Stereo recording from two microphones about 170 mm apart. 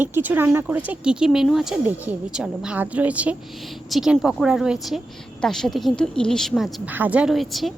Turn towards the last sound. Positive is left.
turn(degrees=0)  # may be behind; listen again after turning